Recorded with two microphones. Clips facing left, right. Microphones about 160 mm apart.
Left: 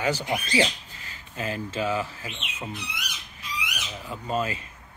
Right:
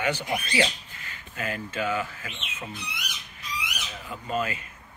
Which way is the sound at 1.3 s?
30° left (ahead or behind).